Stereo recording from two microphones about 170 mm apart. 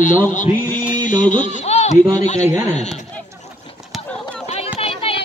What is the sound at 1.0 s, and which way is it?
Speech, 50° left (ahead or behind).